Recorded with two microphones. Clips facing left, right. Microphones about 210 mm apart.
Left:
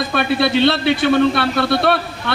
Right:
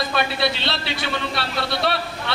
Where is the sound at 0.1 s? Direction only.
55° left (ahead or behind).